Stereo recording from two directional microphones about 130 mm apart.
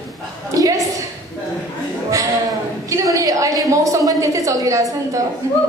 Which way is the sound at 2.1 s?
25° right (ahead or behind).